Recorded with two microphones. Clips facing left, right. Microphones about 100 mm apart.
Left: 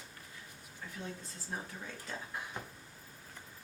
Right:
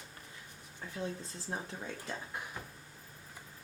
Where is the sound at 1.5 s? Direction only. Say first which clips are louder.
Right 2 dB; 35° right (ahead or behind).